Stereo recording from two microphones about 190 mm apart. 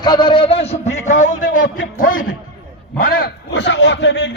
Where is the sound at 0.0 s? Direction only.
25° left (ahead or behind).